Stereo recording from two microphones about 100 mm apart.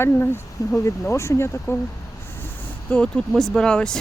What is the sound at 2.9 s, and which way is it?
Speech, 10° left (ahead or behind).